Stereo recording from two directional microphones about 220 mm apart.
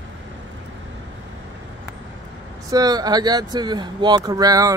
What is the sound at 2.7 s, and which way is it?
Speech, 15° right (ahead or behind).